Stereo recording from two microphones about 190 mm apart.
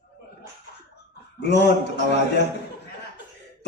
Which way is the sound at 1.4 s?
60° left (ahead or behind).